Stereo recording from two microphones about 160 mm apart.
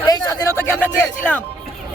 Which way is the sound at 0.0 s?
25° left (ahead or behind).